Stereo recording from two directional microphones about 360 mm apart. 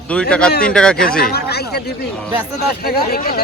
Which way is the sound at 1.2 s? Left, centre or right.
Left.